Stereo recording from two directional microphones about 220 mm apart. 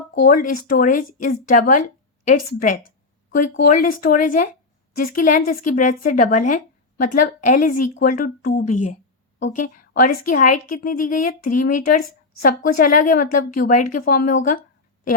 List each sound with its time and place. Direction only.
0.2 s a woman's voice: 40° left (ahead or behind)